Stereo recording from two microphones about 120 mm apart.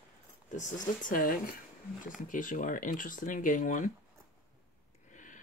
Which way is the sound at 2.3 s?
90° left.